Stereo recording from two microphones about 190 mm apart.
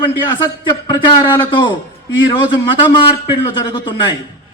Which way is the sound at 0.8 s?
25° left (ahead or behind).